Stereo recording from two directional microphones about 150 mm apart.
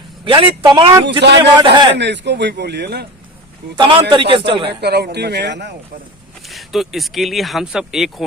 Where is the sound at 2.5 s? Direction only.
90° right.